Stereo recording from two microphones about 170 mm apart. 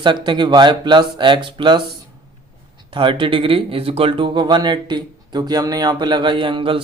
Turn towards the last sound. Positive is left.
turn(degrees=-30)  # may be behind; listen again after turning